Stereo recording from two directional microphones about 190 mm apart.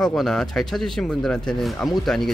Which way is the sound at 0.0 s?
Centre (ahead or behind).